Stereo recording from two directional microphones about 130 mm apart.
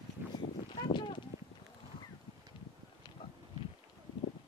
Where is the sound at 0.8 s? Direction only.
35° left (ahead or behind).